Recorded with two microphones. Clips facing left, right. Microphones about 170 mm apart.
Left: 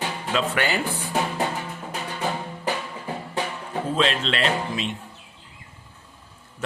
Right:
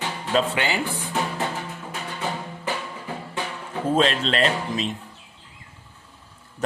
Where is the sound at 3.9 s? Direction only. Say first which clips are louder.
Right 3 dB; 40° right (ahead or behind).